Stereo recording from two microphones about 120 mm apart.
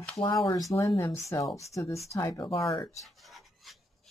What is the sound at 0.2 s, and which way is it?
Speech, 30° left (ahead or behind).